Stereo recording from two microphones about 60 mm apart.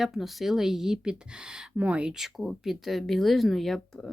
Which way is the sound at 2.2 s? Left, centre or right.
Centre.